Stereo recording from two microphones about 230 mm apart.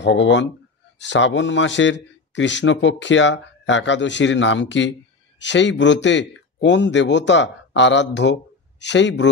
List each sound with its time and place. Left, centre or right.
0.0 s a man's voice: left